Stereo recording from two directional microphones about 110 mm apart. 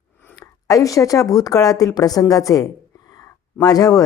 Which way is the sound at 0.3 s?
30° left (ahead or behind).